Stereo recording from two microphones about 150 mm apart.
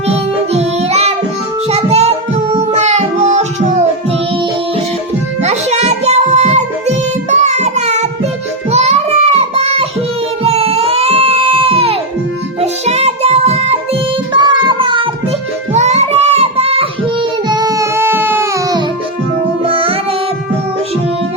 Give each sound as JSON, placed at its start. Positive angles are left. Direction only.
{"t": 0.1, "sound": "music", "side_deg": -45}
{"t": 1.7, "sound": "child singing", "side_deg": -45}
{"t": 5.4, "sound": "music", "side_deg": -50}
{"t": 8.7, "sound": "child singing", "side_deg": -45}
{"t": 10.4, "sound": "music", "side_deg": -40}
{"t": 14.3, "sound": "child singing", "side_deg": -30}
{"t": 15.7, "sound": "child singing", "side_deg": -50}
{"t": 17.5, "sound": "baby cry", "side_deg": -25}
{"t": 19.6, "sound": "music", "side_deg": -40}